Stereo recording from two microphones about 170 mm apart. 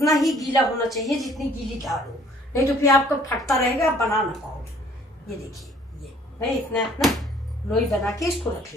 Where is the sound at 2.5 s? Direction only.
15° left (ahead or behind).